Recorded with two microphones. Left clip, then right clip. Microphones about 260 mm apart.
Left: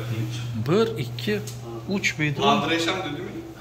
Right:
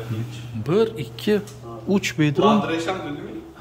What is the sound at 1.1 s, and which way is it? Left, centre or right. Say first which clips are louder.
Speech: right 6 dB; right.